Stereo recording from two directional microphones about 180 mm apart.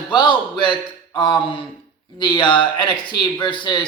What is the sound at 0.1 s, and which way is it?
Speech, 25° left (ahead or behind).